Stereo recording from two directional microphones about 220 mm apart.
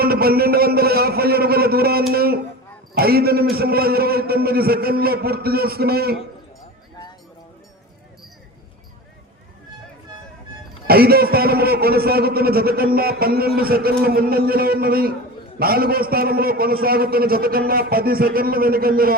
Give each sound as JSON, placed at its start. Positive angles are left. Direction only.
{"t": 0.0, "sound": "a man's voice", "side_deg": -45}
{"t": 10.8, "sound": "a man's voice", "side_deg": -45}